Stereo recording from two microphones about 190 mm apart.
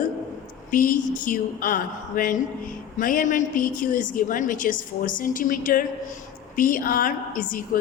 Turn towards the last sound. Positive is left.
turn(degrees=45)  # may be behind; listen again after turning